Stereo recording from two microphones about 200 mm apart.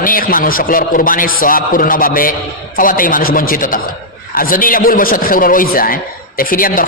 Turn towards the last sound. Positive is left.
turn(degrees=45)  # may be behind; listen again after turning